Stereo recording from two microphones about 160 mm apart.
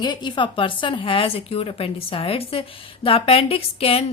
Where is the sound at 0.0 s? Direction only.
25° left (ahead or behind).